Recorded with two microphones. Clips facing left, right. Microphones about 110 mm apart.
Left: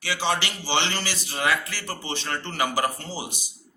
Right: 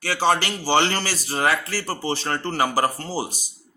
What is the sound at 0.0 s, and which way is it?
A man's voice, 45° right (ahead or behind).